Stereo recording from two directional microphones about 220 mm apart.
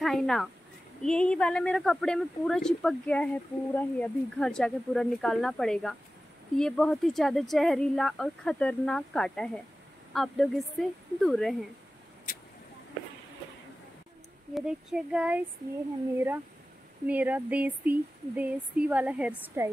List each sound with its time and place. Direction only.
0.0 s speech: centre (ahead or behind)
14.5 s speech: 5° right (ahead or behind)
17.0 s speech: 5° right (ahead or behind)